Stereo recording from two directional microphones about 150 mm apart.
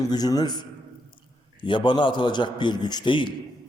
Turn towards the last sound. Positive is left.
turn(degrees=30)  # may be behind; listen again after turning